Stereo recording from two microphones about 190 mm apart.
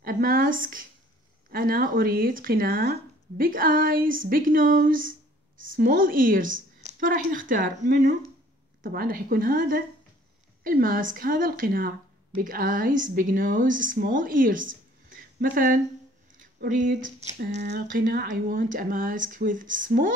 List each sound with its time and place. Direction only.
0.0 s a woman's voice: 50° right (ahead or behind)
15.0 s a sound: 45° right (ahead or behind)
16.5 s speech: 45° right (ahead or behind)
17.6 s speech: 55° right (ahead or behind)